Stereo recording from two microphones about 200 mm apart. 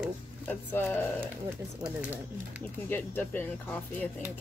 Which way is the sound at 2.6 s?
10° left (ahead or behind).